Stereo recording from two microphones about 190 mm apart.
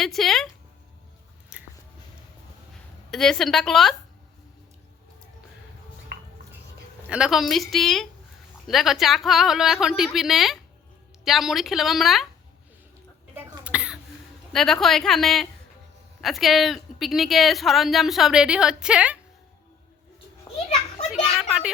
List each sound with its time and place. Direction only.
0.0 s speech: centre (ahead or behind)
1.5 s a sound: 5° right (ahead or behind)
3.1 s speech: centre (ahead or behind)
6.1 s dishes: 50° right (ahead or behind)
7.1 s speech: 5° right (ahead or behind)
13.3 s cough: 5° right (ahead or behind)
14.5 s speech: centre (ahead or behind)
20.5 s children playing: 20° left (ahead or behind)
21.3 s speech: 5° right (ahead or behind)